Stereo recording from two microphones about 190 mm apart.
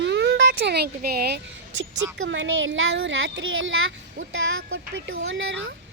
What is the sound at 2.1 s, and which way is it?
Speech, 75° right (ahead or behind).